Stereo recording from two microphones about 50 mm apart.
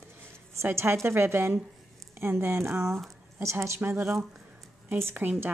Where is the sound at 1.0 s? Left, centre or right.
Right.